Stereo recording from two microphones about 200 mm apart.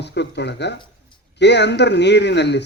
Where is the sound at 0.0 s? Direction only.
60° left (ahead or behind).